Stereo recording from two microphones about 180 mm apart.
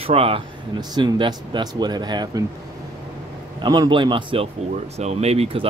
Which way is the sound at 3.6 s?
25° right (ahead or behind).